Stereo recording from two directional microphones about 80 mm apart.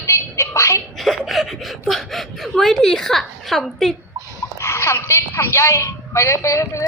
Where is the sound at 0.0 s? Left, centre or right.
Left.